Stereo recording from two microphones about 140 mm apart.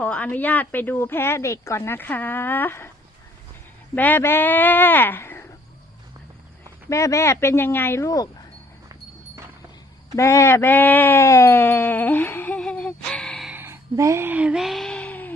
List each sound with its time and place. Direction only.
0.0 s speech: 10° left (ahead or behind)
3.9 s speech: 15° left (ahead or behind)
6.9 s speech: 20° left (ahead or behind)
10.2 s speech: 20° left (ahead or behind)
13.5 s a sound: 15° right (ahead or behind); by 15.3 s 10° left (ahead or behind)